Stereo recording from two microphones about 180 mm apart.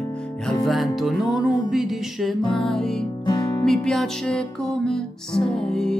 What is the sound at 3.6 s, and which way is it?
Music, centre (ahead or behind).